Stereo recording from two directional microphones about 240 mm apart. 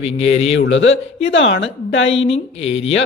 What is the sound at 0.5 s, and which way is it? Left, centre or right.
A woman's voice, left.